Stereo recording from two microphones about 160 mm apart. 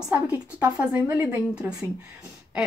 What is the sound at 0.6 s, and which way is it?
A woman's voice, 15° right (ahead or behind).